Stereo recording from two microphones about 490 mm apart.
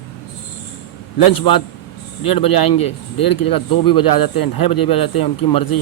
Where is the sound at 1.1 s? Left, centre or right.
Left.